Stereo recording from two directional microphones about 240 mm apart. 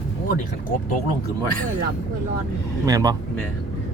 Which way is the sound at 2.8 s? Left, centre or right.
Centre.